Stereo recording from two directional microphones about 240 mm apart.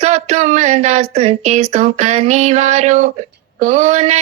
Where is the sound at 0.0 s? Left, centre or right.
Right.